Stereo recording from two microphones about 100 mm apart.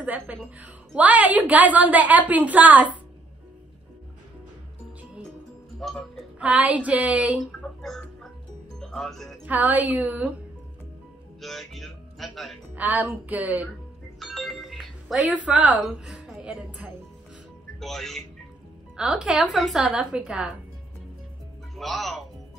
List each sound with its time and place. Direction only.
0.0 s a woman's voice: 15° right (ahead or behind)
5.8 s music: 5° left (ahead or behind)
6.4 s a woman's voice: 15° right (ahead or behind)
7.6 s chicken: 5° left (ahead or behind)
8.7 s speech: 5° left (ahead or behind)
9.4 s a woman's voice: 15° right (ahead or behind)
11.4 s speech: centre (ahead or behind)
12.7 s a woman's voice: 15° right (ahead or behind)
14.2 s music: centre (ahead or behind)
15.3 s a woman's voice: 15° right (ahead or behind)
17.7 s a woman's voice: 5° left (ahead or behind)
21.7 s speech: centre (ahead or behind)